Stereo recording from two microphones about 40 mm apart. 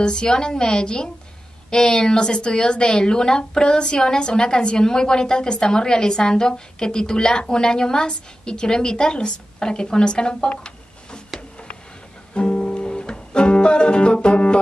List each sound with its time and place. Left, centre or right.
0.0 s a woman's voice: left
12.4 s music: left